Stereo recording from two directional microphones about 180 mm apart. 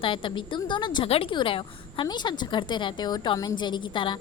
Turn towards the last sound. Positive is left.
turn(degrees=25)  # may be behind; listen again after turning